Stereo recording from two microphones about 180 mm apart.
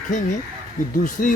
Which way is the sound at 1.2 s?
55° left (ahead or behind).